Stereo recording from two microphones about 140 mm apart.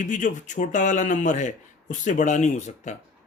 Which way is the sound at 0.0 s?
60° left (ahead or behind).